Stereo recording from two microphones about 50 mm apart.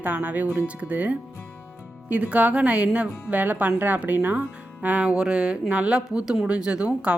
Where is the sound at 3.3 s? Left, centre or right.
Right.